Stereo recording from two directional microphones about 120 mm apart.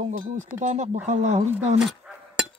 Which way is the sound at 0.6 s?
75° right (ahead or behind).